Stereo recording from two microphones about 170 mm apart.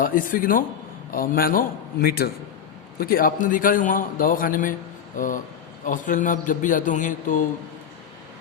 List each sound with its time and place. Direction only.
0.0 s a man's voice: 55° left (ahead or behind)